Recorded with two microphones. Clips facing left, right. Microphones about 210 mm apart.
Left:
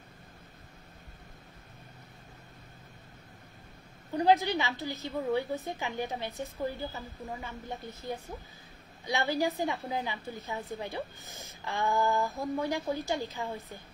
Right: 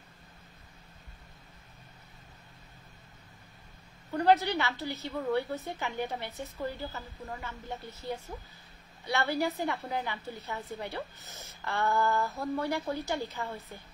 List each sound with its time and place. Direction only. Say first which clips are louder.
4.1 s a woman's voice: even; 15° left (ahead or behind)